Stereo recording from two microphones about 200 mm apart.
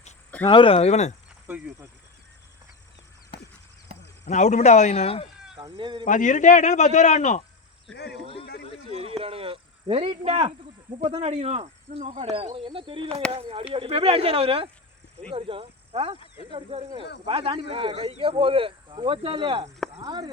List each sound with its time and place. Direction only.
0.4 s speech: 25° left (ahead or behind)
1.5 s speech: 10° right (ahead or behind)
3.3 s a sound: 25° left (ahead or behind)
4.3 s speech: 35° left (ahead or behind)
5.5 s speech: 20° right (ahead or behind)
6.1 s speech: 40° left (ahead or behind)
7.9 s speech: 55° left (ahead or behind)
8.9 s snake: 30° right (ahead or behind)
11.1 s speech: 30° right (ahead or behind)